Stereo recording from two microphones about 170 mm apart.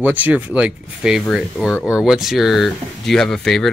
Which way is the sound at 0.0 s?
10° right (ahead or behind).